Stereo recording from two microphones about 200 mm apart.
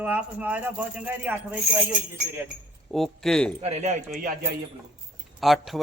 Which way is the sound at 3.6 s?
35° right (ahead or behind).